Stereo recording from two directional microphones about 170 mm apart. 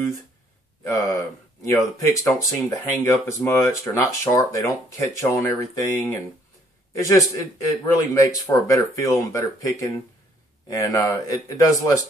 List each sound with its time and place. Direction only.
1.6 s speech: 20° left (ahead or behind)